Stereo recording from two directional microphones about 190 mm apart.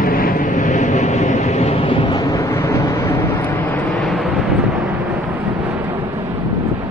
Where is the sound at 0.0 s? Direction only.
45° left (ahead or behind); by 4.9 s 5° right (ahead or behind).